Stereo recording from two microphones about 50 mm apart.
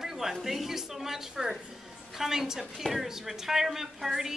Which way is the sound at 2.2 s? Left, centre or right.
Centre.